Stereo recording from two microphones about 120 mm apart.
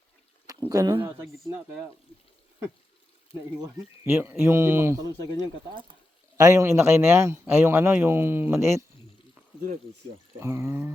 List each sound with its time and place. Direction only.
0.7 s a man's voice: 30° right (ahead or behind)
4.0 s a man's voice: 20° right (ahead or behind)
6.3 s a man's voice: 25° right (ahead or behind)
10.4 s a man's voice: 20° right (ahead or behind)